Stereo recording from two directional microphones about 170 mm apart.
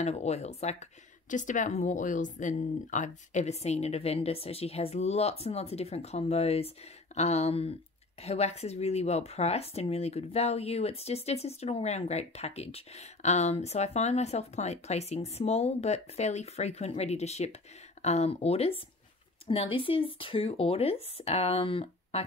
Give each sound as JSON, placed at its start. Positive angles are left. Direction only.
{"t": 0.0, "sound": "speech", "side_deg": 40}